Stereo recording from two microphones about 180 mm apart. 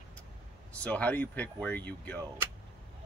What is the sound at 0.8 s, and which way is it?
Speech, 10° left (ahead or behind).